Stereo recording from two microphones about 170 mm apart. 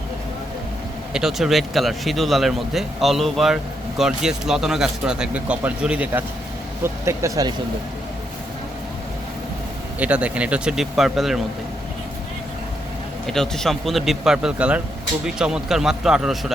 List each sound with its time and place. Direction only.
1.1 s speech: centre (ahead or behind); by 7.5 s 20° right (ahead or behind)
10.0 s speech: 5° right (ahead or behind)
13.2 s speech: 5° left (ahead or behind)